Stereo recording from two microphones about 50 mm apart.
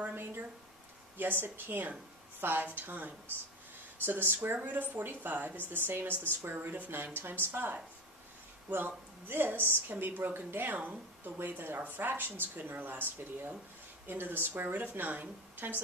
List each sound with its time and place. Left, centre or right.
0.2 s a woman's voice: right